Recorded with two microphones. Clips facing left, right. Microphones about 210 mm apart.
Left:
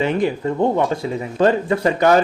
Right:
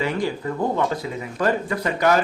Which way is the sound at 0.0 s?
20° left (ahead or behind).